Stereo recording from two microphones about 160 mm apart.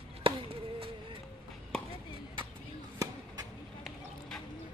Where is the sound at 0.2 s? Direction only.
35° right (ahead or behind).